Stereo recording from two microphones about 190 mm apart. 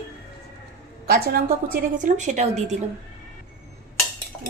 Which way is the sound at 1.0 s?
55° right (ahead or behind).